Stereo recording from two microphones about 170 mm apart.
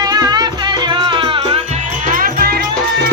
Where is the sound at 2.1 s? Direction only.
55° right (ahead or behind).